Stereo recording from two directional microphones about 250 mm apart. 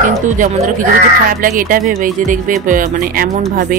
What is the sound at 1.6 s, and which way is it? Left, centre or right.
Speech, right.